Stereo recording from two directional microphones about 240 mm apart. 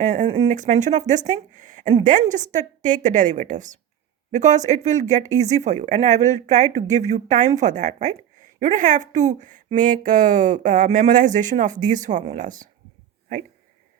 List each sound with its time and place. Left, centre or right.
0.0 s speech: right